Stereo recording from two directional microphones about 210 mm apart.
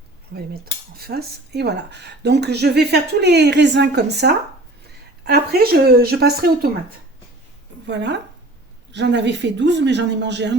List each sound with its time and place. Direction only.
0.3 s speech: 50° right (ahead or behind)
7.9 s speech: 55° right (ahead or behind)